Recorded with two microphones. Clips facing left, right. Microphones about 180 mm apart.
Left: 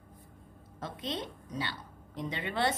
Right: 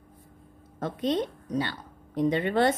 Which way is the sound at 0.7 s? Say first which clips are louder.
Right 10 dB; 50° right (ahead or behind).